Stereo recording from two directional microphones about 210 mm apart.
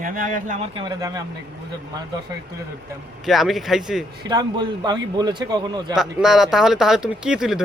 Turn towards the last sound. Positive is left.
turn(degrees=-5)  # may be behind; listen again after turning